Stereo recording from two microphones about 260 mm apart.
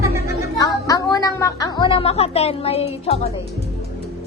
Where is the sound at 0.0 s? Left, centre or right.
Centre.